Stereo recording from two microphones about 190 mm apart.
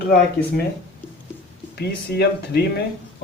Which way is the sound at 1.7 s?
60° left (ahead or behind).